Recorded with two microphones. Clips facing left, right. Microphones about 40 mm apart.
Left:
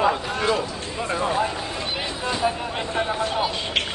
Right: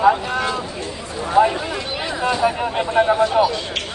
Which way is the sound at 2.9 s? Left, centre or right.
Centre.